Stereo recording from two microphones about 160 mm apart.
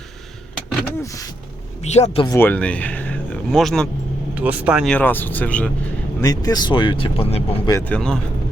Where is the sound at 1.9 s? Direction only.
45° left (ahead or behind).